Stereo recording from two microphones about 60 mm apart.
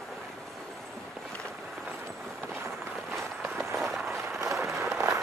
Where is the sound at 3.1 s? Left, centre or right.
Right.